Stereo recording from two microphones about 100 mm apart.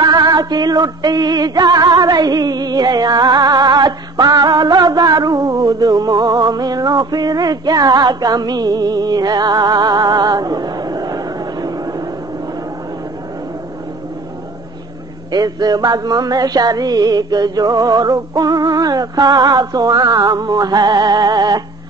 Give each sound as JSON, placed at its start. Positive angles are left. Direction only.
{"t": 0.0, "sound": "music", "side_deg": -40}
{"t": 15.3, "sound": "music", "side_deg": -40}